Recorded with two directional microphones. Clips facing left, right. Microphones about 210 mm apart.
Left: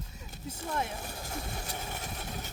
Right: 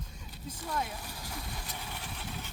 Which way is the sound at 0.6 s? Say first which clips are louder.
Left 2 dB; 45° left (ahead or behind).